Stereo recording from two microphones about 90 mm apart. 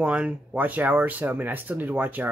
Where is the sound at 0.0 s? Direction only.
15° right (ahead or behind).